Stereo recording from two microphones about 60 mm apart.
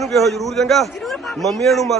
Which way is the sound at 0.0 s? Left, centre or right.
Centre.